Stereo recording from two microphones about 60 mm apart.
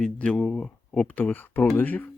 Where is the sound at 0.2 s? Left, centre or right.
Centre.